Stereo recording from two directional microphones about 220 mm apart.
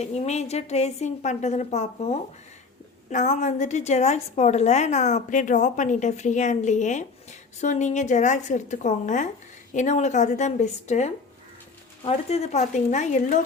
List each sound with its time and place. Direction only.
0.0 s a woman's voice: 30° left (ahead or behind)